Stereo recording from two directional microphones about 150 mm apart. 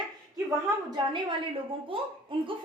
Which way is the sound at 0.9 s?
30° right (ahead or behind).